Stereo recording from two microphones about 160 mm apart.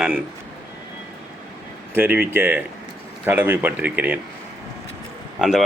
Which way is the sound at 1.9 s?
10° right (ahead or behind).